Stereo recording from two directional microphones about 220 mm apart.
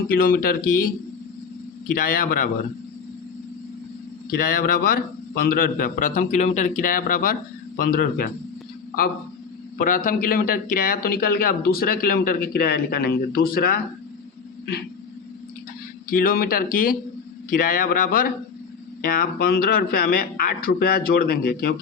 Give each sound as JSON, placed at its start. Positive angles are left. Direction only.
{"t": 0.1, "sound": "a man's voice", "side_deg": 40}
{"t": 2.0, "sound": "a man's voice", "side_deg": 40}
{"t": 4.3, "sound": "a man's voice", "side_deg": 40}
{"t": 9.7, "sound": "a man's voice", "side_deg": 35}
{"t": 16.1, "sound": "a man's voice", "side_deg": 40}